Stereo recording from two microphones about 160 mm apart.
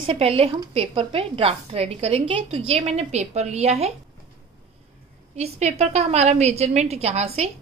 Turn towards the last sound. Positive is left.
turn(degrees=-40)  # may be behind; listen again after turning